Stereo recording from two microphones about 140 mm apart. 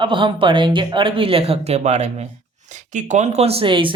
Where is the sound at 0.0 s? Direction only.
35° right (ahead or behind).